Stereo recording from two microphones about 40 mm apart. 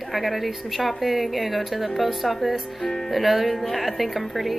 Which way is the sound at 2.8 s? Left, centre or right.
Centre.